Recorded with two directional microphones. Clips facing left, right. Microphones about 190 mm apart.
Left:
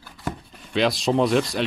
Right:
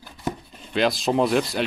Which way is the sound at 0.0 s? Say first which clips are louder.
Right 2 dB; 20° right (ahead or behind).